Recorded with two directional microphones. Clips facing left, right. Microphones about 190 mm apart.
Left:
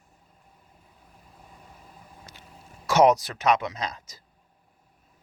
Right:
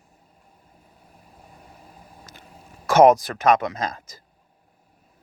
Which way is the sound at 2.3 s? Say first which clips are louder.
Right 3 dB; 45° right (ahead or behind).